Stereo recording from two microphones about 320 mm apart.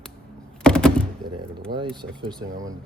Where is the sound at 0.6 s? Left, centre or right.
Centre.